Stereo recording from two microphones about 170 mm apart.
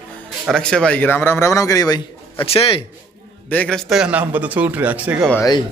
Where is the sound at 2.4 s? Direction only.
35° left (ahead or behind).